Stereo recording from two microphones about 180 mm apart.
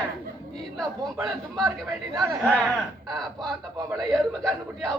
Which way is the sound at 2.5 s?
5° left (ahead or behind).